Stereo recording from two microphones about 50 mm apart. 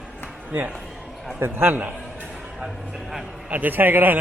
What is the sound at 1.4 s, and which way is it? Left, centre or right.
Speech, right.